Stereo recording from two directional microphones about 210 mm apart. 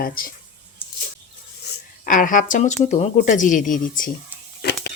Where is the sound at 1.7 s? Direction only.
50° left (ahead or behind).